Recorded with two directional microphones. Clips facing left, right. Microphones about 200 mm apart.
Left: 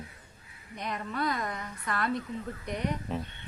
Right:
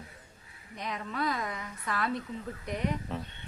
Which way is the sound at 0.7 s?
Centre (ahead or behind).